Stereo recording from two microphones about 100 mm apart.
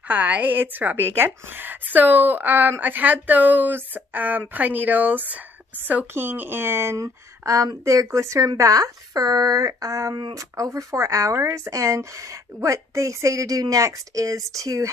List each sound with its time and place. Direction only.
0.1 s a woman's voice: 15° right (ahead or behind); by 14.9 s 35° right (ahead or behind)